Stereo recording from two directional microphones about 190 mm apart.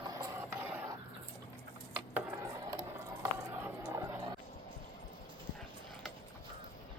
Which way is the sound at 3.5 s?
10° right (ahead or behind).